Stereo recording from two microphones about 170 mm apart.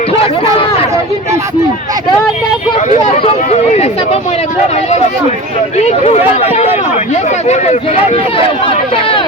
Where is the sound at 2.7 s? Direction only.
35° left (ahead or behind).